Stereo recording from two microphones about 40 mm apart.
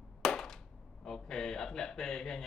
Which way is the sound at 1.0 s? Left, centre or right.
Centre.